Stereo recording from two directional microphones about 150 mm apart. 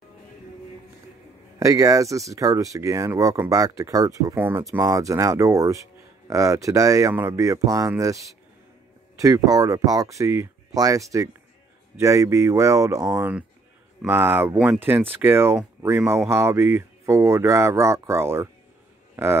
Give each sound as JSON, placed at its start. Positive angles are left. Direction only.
{"t": 1.6, "sound": "speech", "side_deg": -20}